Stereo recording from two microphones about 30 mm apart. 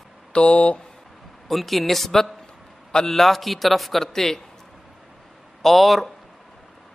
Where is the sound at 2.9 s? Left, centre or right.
Centre.